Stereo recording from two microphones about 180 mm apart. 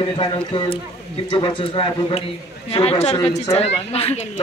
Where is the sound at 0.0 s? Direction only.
30° left (ahead or behind).